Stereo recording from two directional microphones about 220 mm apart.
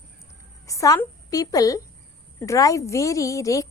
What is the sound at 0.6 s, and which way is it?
A woman's voice, 15° left (ahead or behind).